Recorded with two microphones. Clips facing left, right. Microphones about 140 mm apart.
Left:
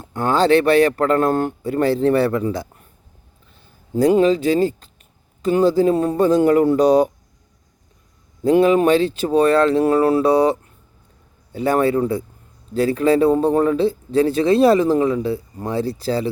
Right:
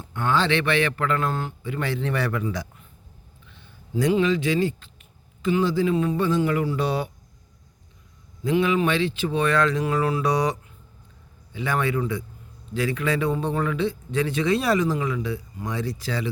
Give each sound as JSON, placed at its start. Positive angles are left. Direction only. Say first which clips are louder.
{"t": 0.0, "sound": "a man's voice", "louder": "left 6 dB", "side_deg": 40}
{"t": 8.4, "sound": "a man's voice", "louder": "left 8 dB", "side_deg": 40}